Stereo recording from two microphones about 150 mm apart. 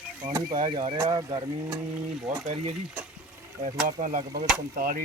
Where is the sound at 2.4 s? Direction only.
45° right (ahead or behind).